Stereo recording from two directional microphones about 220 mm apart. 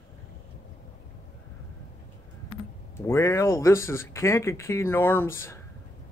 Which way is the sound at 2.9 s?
10° left (ahead or behind).